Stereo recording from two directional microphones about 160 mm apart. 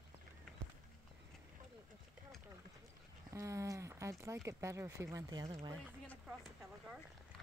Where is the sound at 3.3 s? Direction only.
20° right (ahead or behind).